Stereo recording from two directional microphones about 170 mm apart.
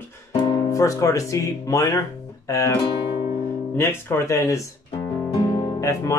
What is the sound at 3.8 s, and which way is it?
Speech, 15° left (ahead or behind).